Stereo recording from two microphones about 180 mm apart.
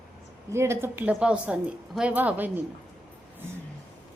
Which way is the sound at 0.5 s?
15° right (ahead or behind).